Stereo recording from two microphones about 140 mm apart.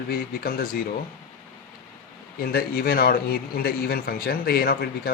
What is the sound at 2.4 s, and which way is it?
A man's voice, 90° left.